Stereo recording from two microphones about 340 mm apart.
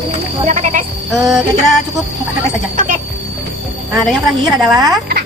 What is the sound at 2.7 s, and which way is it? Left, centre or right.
Music, right.